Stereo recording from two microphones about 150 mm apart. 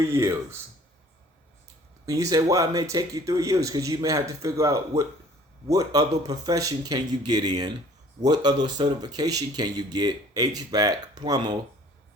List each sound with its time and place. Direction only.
0.0 s speech: 20° right (ahead or behind)
2.0 s speech: 25° right (ahead or behind)